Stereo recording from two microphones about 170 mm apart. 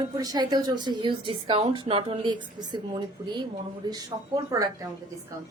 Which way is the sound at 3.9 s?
20° right (ahead or behind).